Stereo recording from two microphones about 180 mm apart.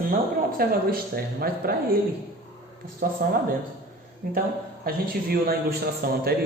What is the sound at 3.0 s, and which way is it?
Speech, 50° right (ahead or behind).